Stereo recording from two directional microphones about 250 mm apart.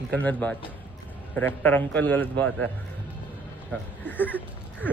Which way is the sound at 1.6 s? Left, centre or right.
Centre.